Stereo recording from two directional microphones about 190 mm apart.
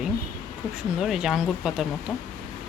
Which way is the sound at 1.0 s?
Centre (ahead or behind).